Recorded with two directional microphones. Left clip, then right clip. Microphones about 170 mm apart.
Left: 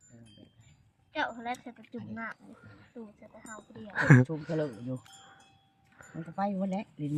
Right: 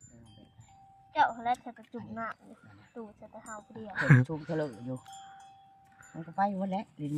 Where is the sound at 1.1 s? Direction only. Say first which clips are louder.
Right 6 dB; 10° right (ahead or behind).